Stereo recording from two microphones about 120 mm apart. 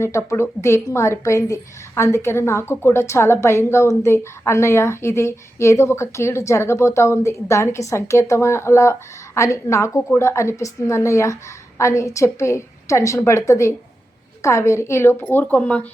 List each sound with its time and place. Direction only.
0.0 s a woman's voice: 25° left (ahead or behind)